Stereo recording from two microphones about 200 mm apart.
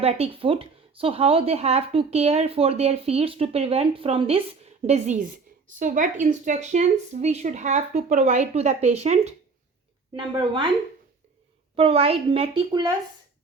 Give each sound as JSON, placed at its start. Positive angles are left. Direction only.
{"t": 0.0, "sound": "speech", "side_deg": -30}
{"t": 11.8, "sound": "speech", "side_deg": -30}